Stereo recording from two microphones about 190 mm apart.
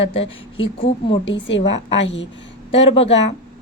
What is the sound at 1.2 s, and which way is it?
A woman's voice, 75° left (ahead or behind).